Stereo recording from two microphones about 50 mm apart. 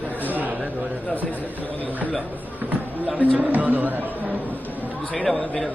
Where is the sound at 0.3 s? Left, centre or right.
Right.